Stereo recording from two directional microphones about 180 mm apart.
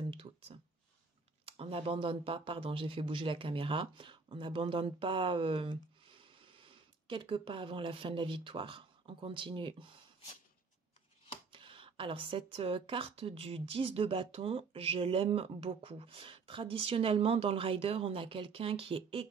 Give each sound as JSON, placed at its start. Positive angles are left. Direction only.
{"t": 0.1, "sound": "speech", "side_deg": -30}
{"t": 11.5, "sound": "speech", "side_deg": -30}